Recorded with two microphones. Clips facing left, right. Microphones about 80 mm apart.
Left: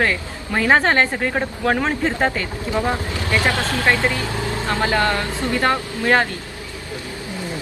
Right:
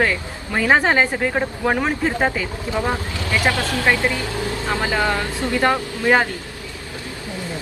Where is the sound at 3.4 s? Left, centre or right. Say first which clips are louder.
Right 1 dB; right.